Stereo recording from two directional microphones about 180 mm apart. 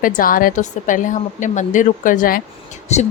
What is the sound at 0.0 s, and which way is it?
A woman's voice, 50° left (ahead or behind).